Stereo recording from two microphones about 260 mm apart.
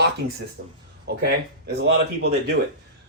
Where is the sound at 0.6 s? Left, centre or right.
Right.